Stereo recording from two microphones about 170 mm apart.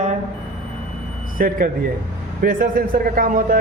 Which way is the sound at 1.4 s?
60° right (ahead or behind).